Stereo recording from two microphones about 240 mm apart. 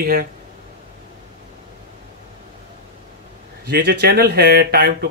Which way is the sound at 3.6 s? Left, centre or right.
Right.